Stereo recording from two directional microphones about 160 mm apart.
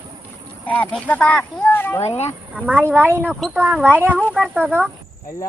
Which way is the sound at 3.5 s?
10° right (ahead or behind).